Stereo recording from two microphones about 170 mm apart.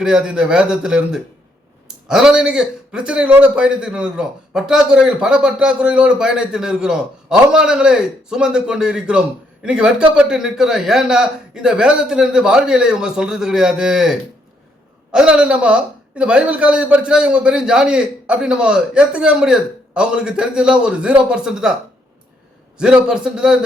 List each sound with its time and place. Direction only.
0.0 s a man's voice: 5° right (ahead or behind)
22.8 s a man's voice: 5° right (ahead or behind)